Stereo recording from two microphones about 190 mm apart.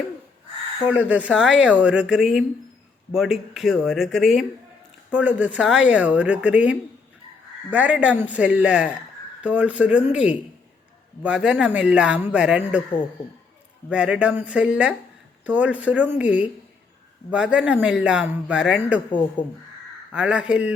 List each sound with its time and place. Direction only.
0.9 s speech: 10° right (ahead or behind)
13.9 s speech: 5° right (ahead or behind)
19.4 s speech: 45° left (ahead or behind)
20.1 s speech: 5° right (ahead or behind)